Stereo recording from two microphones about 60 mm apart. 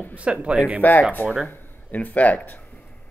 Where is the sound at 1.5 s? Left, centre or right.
Left.